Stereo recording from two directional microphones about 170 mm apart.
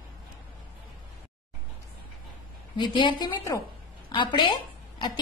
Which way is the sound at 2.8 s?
30° left (ahead or behind).